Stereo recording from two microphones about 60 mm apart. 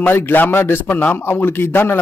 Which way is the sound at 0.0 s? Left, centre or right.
Left.